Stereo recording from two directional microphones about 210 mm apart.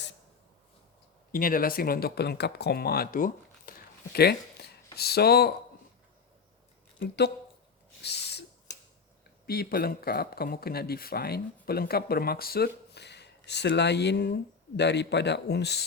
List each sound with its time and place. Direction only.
1.3 s speech: 45° left (ahead or behind)
4.6 s a sound: 50° left (ahead or behind)
4.9 s speech: 50° left (ahead or behind)
7.0 s speech: 50° left (ahead or behind)
8.0 s a sound: 50° left (ahead or behind)
9.5 s a man's voice: 45° left (ahead or behind)